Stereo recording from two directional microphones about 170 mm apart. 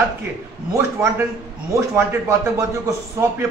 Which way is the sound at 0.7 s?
15° right (ahead or behind).